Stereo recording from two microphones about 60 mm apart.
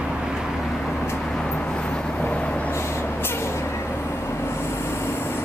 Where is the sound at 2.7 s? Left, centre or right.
Left.